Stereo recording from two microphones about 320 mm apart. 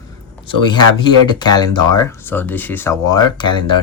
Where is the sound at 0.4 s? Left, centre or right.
Centre.